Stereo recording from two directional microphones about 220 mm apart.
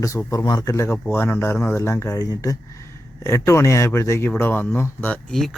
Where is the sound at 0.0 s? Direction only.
15° left (ahead or behind).